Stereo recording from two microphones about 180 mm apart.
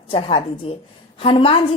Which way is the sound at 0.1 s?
30° left (ahead or behind).